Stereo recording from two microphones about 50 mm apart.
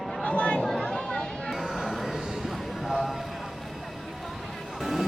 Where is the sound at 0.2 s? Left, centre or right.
Left.